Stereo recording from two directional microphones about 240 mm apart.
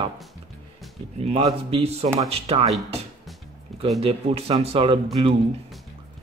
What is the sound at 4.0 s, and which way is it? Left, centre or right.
Speech, right.